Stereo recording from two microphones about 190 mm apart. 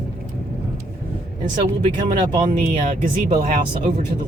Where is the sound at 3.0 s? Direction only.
45° right (ahead or behind).